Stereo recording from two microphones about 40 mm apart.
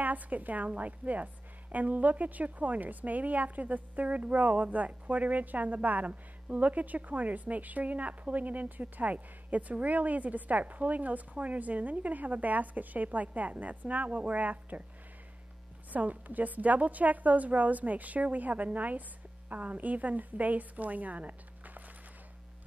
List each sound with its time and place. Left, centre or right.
0.0 s a woman's voice: right
15.9 s a woman's voice: right